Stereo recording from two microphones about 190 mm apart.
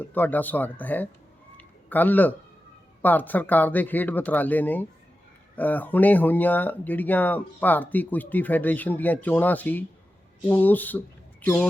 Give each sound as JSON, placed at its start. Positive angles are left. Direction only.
{"t": 0.0, "sound": "speech", "side_deg": 10}
{"t": 1.5, "sound": "a sound", "side_deg": 10}
{"t": 3.0, "sound": "speech", "side_deg": 10}